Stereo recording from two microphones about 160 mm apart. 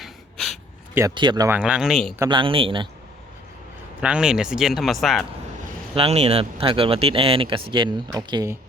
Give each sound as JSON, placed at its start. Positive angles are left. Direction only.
{"t": 0.0, "sound": "a sound", "side_deg": 0}
{"t": 1.1, "sound": "speech", "side_deg": -30}
{"t": 1.5, "sound": "speech", "side_deg": -10}
{"t": 2.3, "sound": "speech", "side_deg": -35}
{"t": 4.0, "sound": "speech", "side_deg": -5}
{"t": 5.9, "sound": "speech", "side_deg": -40}